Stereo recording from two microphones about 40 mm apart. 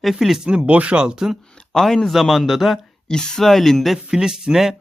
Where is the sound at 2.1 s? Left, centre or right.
Centre.